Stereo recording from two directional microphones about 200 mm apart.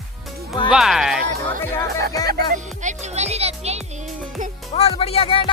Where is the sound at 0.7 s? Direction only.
Centre (ahead or behind).